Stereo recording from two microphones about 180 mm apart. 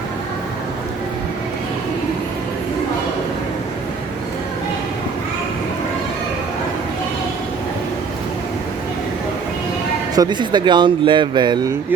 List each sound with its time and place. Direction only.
10.2 s speech: 25° right (ahead or behind)